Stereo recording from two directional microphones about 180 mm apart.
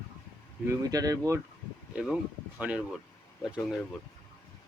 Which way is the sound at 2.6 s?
5° right (ahead or behind).